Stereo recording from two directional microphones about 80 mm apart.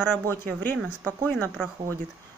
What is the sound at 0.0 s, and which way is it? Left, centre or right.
Speech, left.